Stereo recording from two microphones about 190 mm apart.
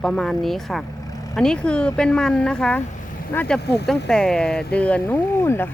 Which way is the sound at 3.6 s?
60° left (ahead or behind).